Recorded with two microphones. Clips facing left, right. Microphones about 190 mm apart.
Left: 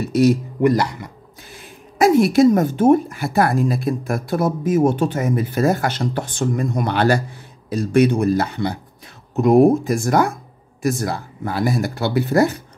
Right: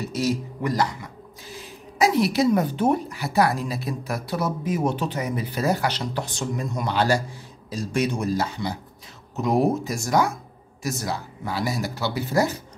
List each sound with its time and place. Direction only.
0.0 s speech: 60° left (ahead or behind)